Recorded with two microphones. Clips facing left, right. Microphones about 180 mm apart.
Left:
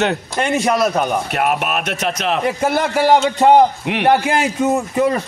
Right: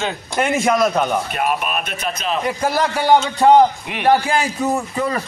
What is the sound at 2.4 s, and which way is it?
Speech, 25° left (ahead or behind).